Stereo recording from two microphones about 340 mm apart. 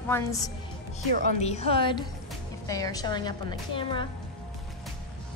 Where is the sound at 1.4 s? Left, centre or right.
Centre.